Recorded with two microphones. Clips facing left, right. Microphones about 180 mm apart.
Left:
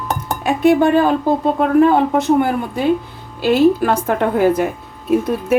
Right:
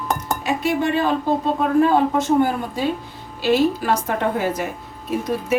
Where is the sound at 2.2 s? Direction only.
65° left (ahead or behind).